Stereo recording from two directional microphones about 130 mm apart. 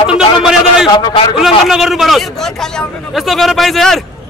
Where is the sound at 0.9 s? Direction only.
35° left (ahead or behind).